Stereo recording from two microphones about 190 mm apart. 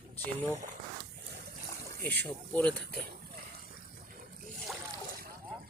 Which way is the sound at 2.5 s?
5° left (ahead or behind).